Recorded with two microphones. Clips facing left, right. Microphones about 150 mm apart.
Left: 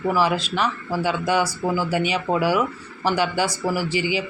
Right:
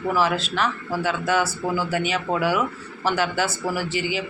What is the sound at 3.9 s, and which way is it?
Speech, 50° right (ahead or behind).